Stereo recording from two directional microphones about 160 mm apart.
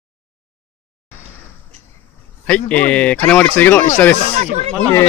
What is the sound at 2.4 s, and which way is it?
Speech, 10° left (ahead or behind).